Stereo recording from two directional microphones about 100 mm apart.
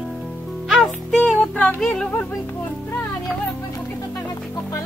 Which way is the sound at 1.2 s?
15° left (ahead or behind).